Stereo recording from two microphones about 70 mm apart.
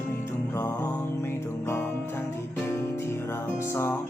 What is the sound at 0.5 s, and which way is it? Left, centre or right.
Music, left.